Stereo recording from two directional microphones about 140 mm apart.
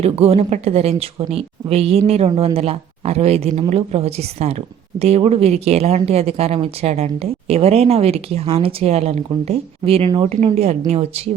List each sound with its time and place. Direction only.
0.0 s a woman's voice: 45° right (ahead or behind)